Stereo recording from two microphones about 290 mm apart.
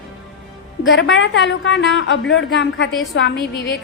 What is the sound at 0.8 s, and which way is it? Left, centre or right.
A woman's voice, left.